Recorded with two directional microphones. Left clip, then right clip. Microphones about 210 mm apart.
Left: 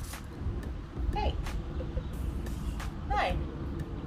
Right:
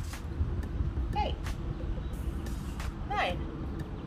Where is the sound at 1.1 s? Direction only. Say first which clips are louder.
Right 2 dB; 10° right (ahead or behind).